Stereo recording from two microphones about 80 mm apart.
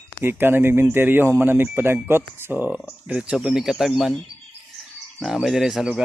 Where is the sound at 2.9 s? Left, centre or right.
Centre.